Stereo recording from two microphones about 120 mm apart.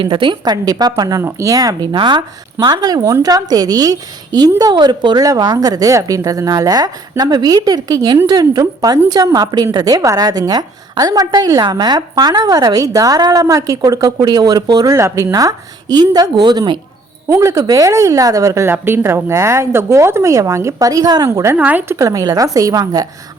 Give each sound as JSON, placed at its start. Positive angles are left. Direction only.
{"t": 0.0, "sound": "speech", "side_deg": -45}
{"t": 17.2, "sound": "speech", "side_deg": -25}